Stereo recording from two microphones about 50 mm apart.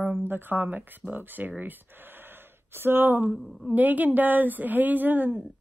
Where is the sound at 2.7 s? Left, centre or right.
Right.